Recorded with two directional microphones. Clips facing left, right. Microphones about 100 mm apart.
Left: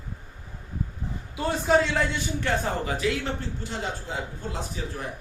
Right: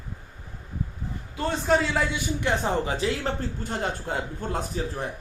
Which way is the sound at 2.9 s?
35° right (ahead or behind).